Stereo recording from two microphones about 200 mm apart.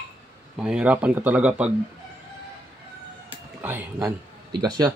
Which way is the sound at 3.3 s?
10° right (ahead or behind).